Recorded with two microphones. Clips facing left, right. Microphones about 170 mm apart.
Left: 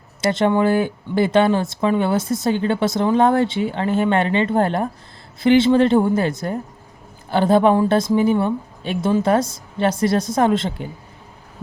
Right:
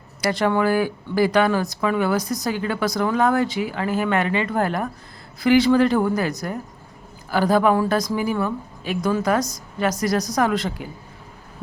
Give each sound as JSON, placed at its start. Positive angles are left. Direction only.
{"t": 0.2, "sound": "speech", "side_deg": 25}